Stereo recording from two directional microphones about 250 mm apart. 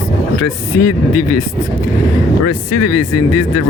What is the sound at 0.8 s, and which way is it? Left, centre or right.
Speech, left.